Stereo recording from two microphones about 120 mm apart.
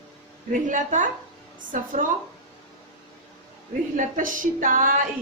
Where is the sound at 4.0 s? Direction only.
90° right.